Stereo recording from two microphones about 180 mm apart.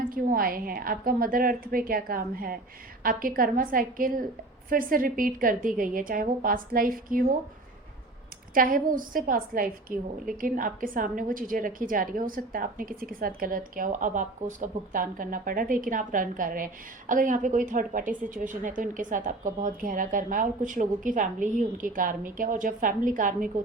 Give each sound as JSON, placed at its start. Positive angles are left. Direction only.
{"t": 0.0, "sound": "a woman's voice", "side_deg": -50}
{"t": 8.5, "sound": "a woman's voice", "side_deg": -50}